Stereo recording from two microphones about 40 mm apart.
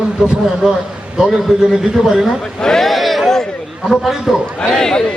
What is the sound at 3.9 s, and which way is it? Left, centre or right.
Speech, centre.